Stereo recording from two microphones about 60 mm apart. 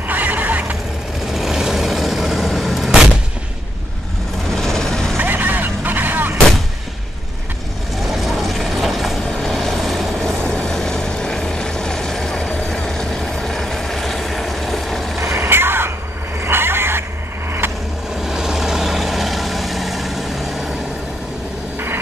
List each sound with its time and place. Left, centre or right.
0.1 s vehicle: right
1.2 s vehicle: centre
2.9 s artillery fire: centre
4.6 s a sound: centre
5.1 s vehicle: right
8.0 s vehicle: centre
10.4 s vehicle: centre
15.2 s vehicle: right
18.1 s vehicle: centre